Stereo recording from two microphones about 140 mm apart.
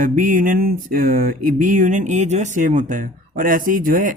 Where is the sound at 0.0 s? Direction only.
75° right (ahead or behind).